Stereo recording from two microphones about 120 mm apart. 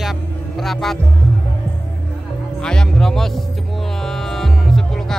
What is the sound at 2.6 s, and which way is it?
Music, 5° left (ahead or behind).